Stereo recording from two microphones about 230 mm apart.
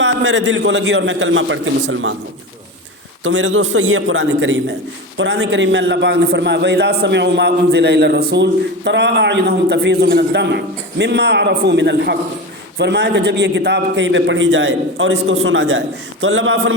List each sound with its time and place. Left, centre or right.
0.0 s a man's voice: right
3.2 s a man's voice: right